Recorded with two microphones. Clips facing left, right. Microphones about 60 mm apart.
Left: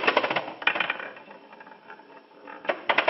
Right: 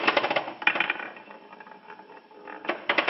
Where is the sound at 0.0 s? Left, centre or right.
Centre.